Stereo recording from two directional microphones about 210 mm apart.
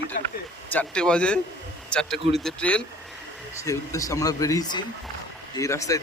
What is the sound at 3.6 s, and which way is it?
Speech, 15° left (ahead or behind).